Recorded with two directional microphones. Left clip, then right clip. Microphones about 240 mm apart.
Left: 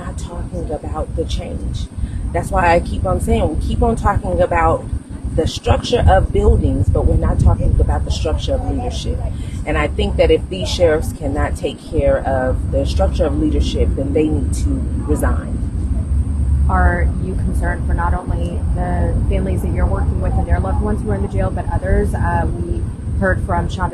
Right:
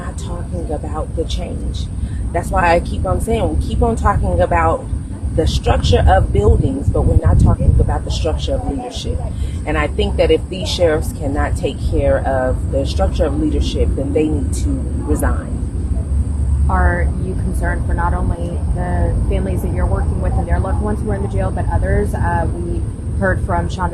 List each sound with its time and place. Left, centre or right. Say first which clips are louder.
2.3 s speech: even; centre
9.6 s speech: right 1 dB; centre
16.6 s speech: even; centre